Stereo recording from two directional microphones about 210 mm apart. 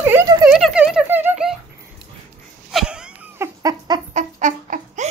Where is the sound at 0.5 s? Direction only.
Centre (ahead or behind).